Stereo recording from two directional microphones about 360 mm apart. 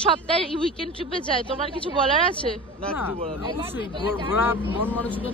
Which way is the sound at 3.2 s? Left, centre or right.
Centre.